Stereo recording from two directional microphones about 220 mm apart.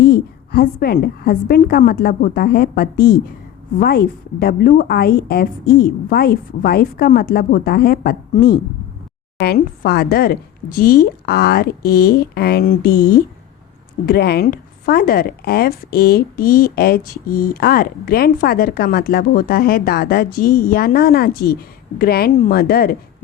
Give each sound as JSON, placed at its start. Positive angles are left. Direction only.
{"t": 0.0, "sound": "a woman's voice", "side_deg": 45}